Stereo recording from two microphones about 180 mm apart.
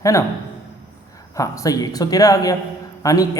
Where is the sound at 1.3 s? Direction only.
20° left (ahead or behind).